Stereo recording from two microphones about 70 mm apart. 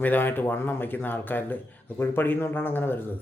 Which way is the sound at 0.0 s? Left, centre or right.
Left.